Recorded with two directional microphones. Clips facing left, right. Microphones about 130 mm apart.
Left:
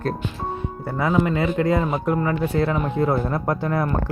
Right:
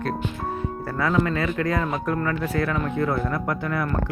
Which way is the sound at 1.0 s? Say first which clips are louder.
Left 2 dB; 20° left (ahead or behind).